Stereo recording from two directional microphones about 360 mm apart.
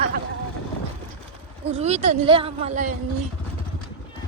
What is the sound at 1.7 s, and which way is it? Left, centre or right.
Speech, centre.